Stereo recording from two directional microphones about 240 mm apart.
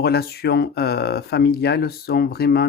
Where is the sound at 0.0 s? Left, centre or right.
Left.